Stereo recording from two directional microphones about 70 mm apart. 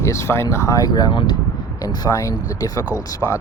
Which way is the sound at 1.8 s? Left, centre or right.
Left.